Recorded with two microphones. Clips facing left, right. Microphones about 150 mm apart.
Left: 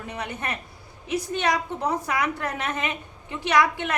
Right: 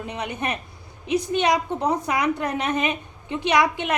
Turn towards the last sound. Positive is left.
turn(degrees=-15)  # may be behind; listen again after turning